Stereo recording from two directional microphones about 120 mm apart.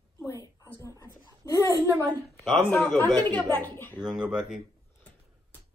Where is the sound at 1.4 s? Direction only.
25° left (ahead or behind).